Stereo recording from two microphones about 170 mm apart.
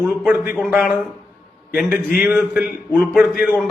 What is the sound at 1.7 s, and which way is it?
Speech, 10° right (ahead or behind).